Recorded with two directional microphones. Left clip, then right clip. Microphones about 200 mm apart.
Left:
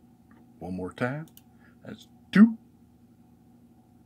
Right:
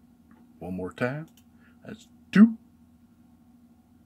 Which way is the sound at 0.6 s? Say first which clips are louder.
Right 1 dB; centre (ahead or behind).